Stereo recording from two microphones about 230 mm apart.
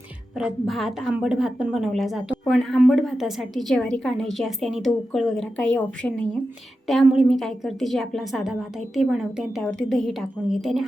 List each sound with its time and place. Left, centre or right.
0.3 s a woman's voice: centre